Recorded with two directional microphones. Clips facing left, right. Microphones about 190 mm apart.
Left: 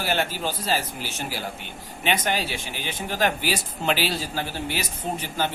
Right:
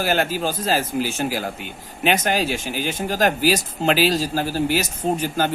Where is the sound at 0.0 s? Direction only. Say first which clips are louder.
Right 5 dB; 45° right (ahead or behind).